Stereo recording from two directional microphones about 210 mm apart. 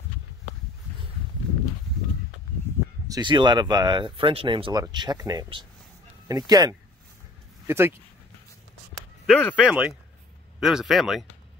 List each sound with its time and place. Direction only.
3.1 s speech: 20° right (ahead or behind)
9.2 s speech: centre (ahead or behind)